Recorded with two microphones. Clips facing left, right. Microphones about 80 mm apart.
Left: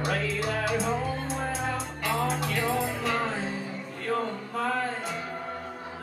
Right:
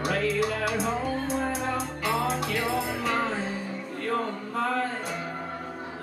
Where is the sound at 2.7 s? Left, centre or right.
Centre.